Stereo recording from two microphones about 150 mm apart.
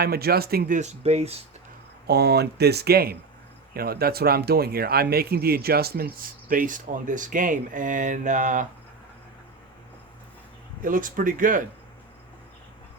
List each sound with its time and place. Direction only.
0.0 s speech: 90° right
0.8 s speech: 45° right (ahead or behind)
2.0 s speech: 90° right
6.1 s speech: 70° right (ahead or behind)
10.8 s speech: 65° right (ahead or behind)